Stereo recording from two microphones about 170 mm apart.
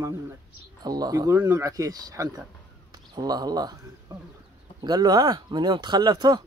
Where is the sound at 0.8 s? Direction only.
25° right (ahead or behind).